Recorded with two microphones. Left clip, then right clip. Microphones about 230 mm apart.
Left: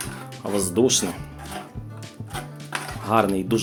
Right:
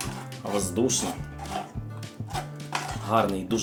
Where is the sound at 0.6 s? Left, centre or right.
Left.